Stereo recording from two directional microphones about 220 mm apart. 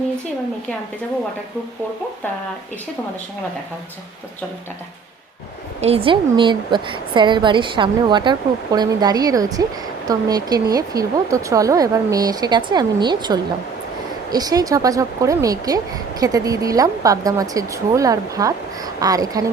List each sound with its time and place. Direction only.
5.8 s a woman's voice: 25° right (ahead or behind)